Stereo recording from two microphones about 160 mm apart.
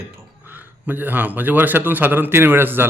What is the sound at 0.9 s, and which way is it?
A man's voice, 10° right (ahead or behind).